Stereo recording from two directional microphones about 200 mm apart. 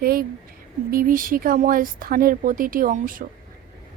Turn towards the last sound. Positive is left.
turn(degrees=-45)  # may be behind; listen again after turning